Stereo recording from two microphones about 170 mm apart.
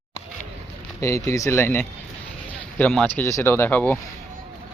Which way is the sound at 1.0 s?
15° left (ahead or behind).